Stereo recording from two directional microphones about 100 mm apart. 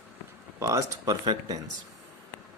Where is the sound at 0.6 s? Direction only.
35° right (ahead or behind).